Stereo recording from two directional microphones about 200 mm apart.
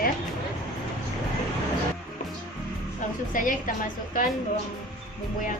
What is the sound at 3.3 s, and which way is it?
Speech, 40° left (ahead or behind).